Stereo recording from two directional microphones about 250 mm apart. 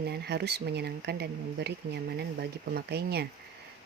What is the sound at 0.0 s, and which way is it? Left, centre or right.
Speech, right.